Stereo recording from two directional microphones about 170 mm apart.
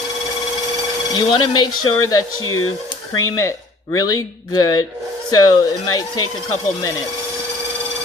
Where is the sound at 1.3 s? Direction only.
25° left (ahead or behind).